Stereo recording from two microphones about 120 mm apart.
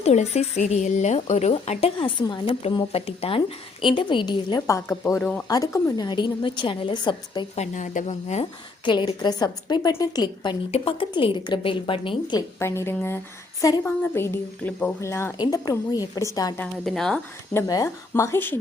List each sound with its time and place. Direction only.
0.0 s speech: 65° left (ahead or behind)
2.0 s speech: 45° left (ahead or behind)
4.6 s a woman's voice: 25° left (ahead or behind)
7.5 s speech: 80° left
8.8 s a woman's voice: 40° left (ahead or behind)
12.4 s a woman's voice: 25° left (ahead or behind)
13.6 s a woman's voice: 30° left (ahead or behind)
13.8 s a woman's voice: 20° left (ahead or behind)
15.4 s a woman's voice: 35° left (ahead or behind)
16.8 s speech: 5° left (ahead or behind)
17.7 s a woman's voice: 30° left (ahead or behind)